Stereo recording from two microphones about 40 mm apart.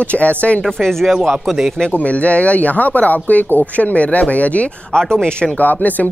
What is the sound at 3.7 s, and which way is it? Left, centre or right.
Speech, left.